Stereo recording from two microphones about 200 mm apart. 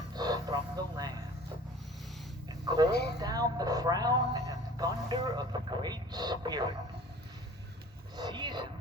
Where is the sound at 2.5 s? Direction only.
20° right (ahead or behind).